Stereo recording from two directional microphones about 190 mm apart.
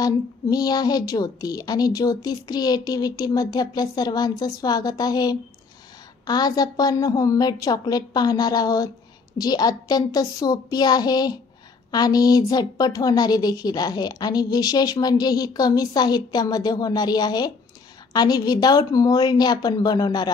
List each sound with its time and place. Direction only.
0.0 s a woman's voice: 20° left (ahead or behind)